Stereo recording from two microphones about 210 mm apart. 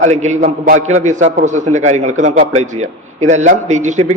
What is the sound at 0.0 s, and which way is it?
A man's voice, 35° right (ahead or behind).